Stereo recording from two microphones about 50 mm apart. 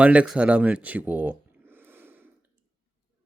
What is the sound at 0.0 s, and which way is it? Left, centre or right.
Speech, right.